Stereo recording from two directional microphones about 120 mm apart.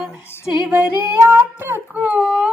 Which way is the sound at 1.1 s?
20° right (ahead or behind).